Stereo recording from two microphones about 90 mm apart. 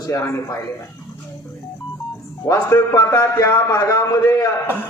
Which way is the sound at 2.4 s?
35° left (ahead or behind).